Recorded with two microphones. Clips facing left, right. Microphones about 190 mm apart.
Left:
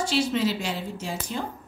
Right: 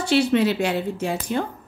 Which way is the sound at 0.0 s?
65° right (ahead or behind).